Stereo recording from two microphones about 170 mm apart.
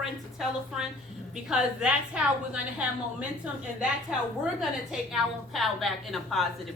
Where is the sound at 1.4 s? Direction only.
5° right (ahead or behind).